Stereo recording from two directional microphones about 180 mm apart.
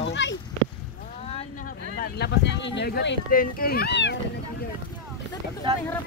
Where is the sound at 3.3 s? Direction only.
55° left (ahead or behind); by 4.6 s 70° left (ahead or behind).